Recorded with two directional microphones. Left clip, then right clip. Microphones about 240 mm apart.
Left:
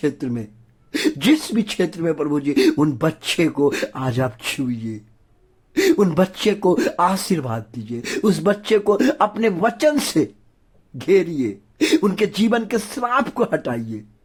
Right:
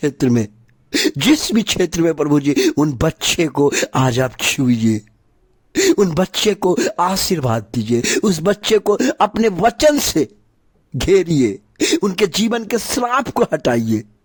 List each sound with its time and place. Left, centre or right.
0.0 s speech: right